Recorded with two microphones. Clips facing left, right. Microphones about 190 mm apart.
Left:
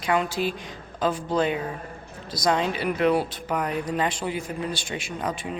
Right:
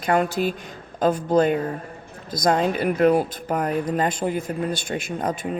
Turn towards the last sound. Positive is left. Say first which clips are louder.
# right 4 dB
turn(degrees=-45)  # may be behind; listen again after turning